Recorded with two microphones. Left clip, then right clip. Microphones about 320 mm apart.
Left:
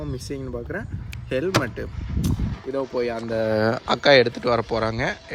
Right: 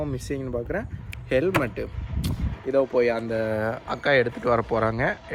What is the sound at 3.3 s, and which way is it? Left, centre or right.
Speech, left.